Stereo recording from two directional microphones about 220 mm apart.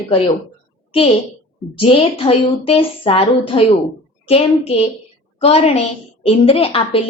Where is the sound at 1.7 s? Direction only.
25° left (ahead or behind).